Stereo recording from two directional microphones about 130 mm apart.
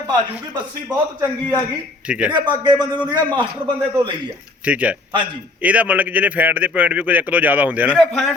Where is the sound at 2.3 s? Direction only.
35° right (ahead or behind).